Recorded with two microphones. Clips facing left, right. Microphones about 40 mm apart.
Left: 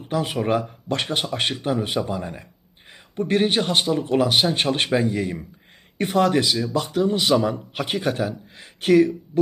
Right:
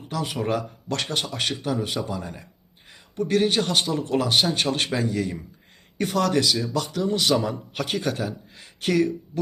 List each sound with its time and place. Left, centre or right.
0.0 s speech: left
4.5 s a man's voice: left